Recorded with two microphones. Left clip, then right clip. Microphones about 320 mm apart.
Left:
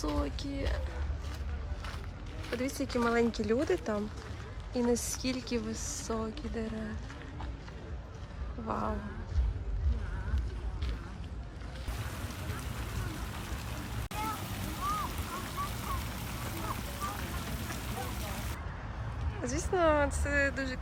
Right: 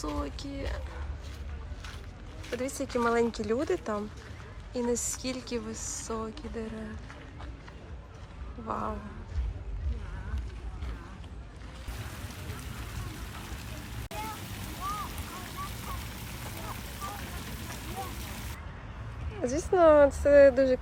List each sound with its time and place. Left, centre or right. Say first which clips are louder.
0.0 s speech: even; centre
2.6 s a woman's voice: right 2 dB; centre
8.6 s speech: right 1 dB; centre
11.9 s a sound: left 1 dB; centre
19.4 s speech: right 6 dB; centre